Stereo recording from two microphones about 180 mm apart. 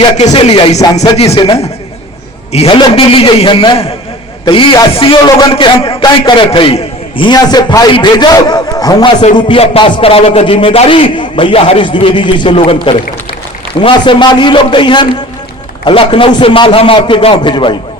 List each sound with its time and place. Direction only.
0.0 s a man's voice: 35° left (ahead or behind)